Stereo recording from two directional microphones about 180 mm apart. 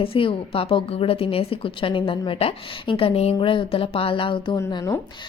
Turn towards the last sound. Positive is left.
turn(degrees=20)  # may be behind; listen again after turning